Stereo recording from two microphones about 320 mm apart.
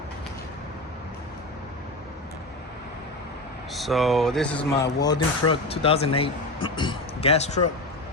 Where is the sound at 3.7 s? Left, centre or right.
Centre; by 7.6 s left.